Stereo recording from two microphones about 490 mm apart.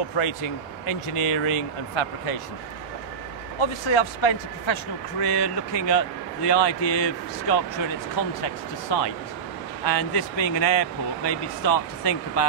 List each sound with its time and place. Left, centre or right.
0.1 s speech: left
3.5 s speech: left
5.2 s speech: left